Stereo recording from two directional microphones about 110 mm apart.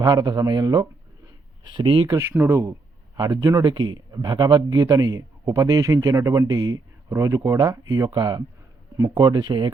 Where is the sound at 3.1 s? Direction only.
35° right (ahead or behind).